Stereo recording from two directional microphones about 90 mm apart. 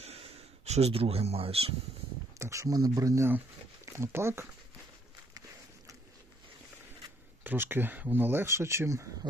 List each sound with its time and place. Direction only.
0.2 s a sound: 90° right
0.9 s speech: 90° right
2.4 s speech: 35° right (ahead or behind)
7.4 s speech: 25° right (ahead or behind)